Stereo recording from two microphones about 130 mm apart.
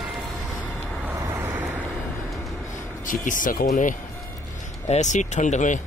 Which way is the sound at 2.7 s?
90° left.